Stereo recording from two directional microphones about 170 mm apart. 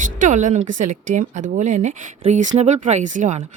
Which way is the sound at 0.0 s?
50° right (ahead or behind).